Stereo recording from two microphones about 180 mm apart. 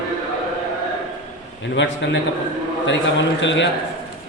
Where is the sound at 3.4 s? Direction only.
80° left.